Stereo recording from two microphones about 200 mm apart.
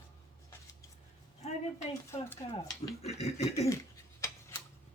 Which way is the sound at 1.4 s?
35° left (ahead or behind).